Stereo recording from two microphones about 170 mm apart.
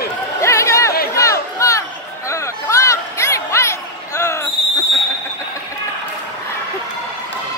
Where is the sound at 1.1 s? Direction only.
20° left (ahead or behind).